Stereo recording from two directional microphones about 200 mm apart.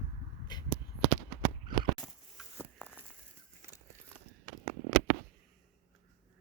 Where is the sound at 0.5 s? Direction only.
20° left (ahead or behind).